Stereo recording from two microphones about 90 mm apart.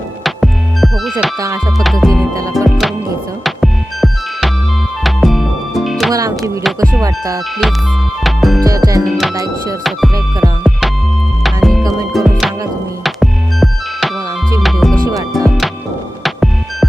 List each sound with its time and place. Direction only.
0.3 s music: centre (ahead or behind)
2.3 s music: 40° right (ahead or behind)
2.6 s music: centre (ahead or behind)
6.1 s music: 40° right (ahead or behind)
8.2 s music: centre (ahead or behind)
8.6 s music: 40° right (ahead or behind)
9.0 s music: centre (ahead or behind)
9.3 s music: 40° right (ahead or behind)
10.6 s music: 5° right (ahead or behind)
11.8 s music: 40° right (ahead or behind)
12.1 s music: centre (ahead or behind)